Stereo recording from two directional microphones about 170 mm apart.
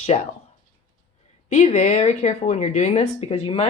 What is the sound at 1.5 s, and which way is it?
Speech, 40° left (ahead or behind).